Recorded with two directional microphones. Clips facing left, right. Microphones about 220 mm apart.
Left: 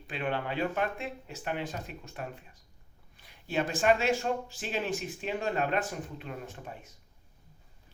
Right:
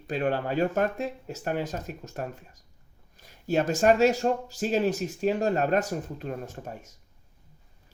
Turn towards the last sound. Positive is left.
turn(degrees=-45)  # may be behind; listen again after turning